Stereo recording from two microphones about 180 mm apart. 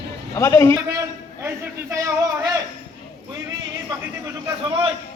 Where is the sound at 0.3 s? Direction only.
15° left (ahead or behind).